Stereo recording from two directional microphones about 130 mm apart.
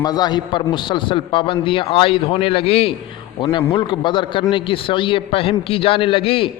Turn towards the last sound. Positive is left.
turn(degrees=45)  # may be behind; listen again after turning